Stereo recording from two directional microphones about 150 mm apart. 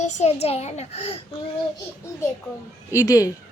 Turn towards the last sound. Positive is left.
turn(degrees=25)  # may be behind; listen again after turning